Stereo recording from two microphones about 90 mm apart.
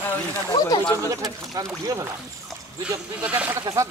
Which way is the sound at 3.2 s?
15° right (ahead or behind).